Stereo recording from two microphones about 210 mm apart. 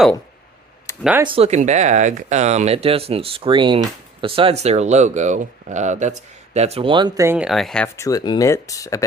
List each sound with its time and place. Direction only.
0.9 s a sound: 15° left (ahead or behind)
1.2 s speech: 25° right (ahead or behind); by 8.0 s 5° left (ahead or behind)
8.0 s speech: 20° left (ahead or behind)